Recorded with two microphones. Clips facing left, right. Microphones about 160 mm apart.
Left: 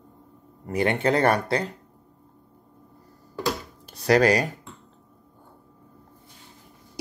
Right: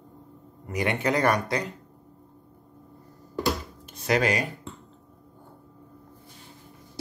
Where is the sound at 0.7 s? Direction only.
30° left (ahead or behind).